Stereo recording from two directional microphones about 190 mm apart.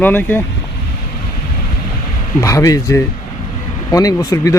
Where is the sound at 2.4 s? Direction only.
15° left (ahead or behind).